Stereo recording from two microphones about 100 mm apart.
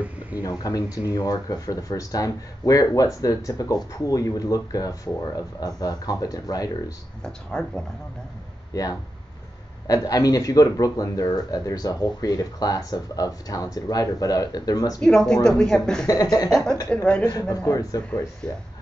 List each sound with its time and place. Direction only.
0.4 s speech: 40° left (ahead or behind)
7.2 s speech: 5° left (ahead or behind)
8.7 s speech: 35° left (ahead or behind)
15.0 s speech: 5° left (ahead or behind)
16.1 s speech: 40° left (ahead or behind)
16.8 s speech: 10° left (ahead or behind)
17.2 s speech: 35° left (ahead or behind)